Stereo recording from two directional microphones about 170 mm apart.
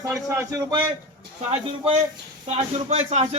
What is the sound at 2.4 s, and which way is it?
Speech, 40° right (ahead or behind).